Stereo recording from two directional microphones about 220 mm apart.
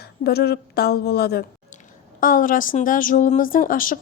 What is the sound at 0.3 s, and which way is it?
A woman's voice, 45° left (ahead or behind).